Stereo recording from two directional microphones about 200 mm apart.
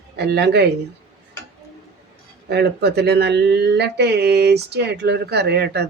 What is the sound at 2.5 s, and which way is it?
Speech, 55° right (ahead or behind).